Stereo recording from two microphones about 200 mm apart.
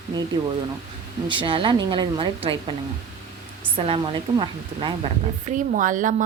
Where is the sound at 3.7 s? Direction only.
25° right (ahead or behind).